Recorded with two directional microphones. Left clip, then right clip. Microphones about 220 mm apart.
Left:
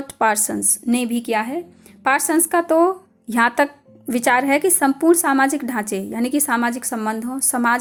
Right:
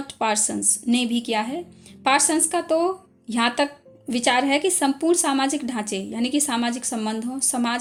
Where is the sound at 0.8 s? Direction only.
5° left (ahead or behind).